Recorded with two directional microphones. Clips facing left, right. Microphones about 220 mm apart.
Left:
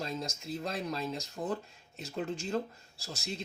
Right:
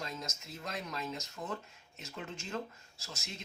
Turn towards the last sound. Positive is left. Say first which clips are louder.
# left 7 dB
turn(degrees=35)  # may be behind; listen again after turning